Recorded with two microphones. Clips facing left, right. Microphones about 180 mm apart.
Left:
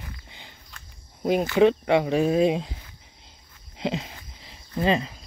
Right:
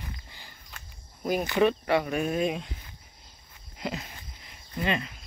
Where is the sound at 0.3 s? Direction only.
20° left (ahead or behind).